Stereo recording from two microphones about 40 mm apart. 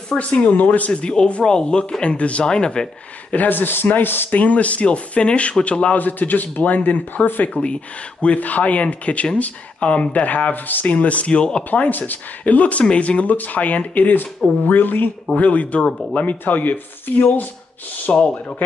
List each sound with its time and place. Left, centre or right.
0.2 s speech: left
1.4 s speech: left
2.1 s speech: left
2.4 s speech: left
3.3 s speech: left
4.3 s speech: left
5.9 s speech: left
7.4 s speech: left
11.7 s speech: left
15.3 s speech: left
18.1 s speech: left